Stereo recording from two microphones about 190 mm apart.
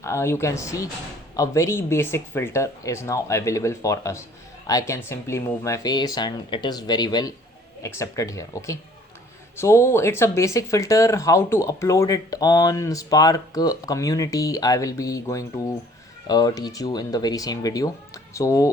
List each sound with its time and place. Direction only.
0.0 s speech: 15° left (ahead or behind)